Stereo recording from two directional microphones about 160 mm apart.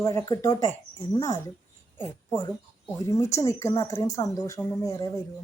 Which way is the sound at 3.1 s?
20° left (ahead or behind).